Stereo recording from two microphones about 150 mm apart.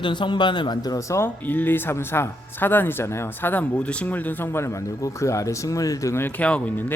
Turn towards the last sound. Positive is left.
turn(degrees=10)  # may be behind; listen again after turning